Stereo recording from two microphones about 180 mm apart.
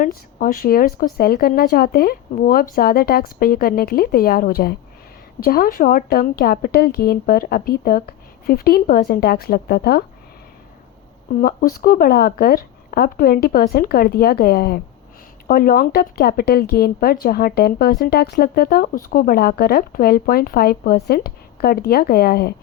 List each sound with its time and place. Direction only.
0.0 s speech: 50° left (ahead or behind)
11.3 s speech: 55° left (ahead or behind)